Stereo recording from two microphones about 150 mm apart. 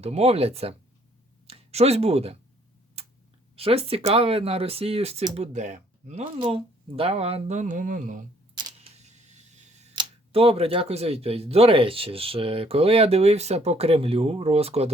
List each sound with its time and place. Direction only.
0.0 s speech: 45° right (ahead or behind)
3.5 s speech: 40° right (ahead or behind)
6.3 s speech: 35° right (ahead or behind); by 8.2 s 65° right (ahead or behind)
8.5 s camera: 30° right (ahead or behind)
9.0 s a sound: 50° right (ahead or behind)
9.9 s speech: 35° right (ahead or behind)